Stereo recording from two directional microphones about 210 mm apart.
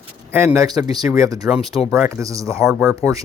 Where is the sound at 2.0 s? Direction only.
15° right (ahead or behind).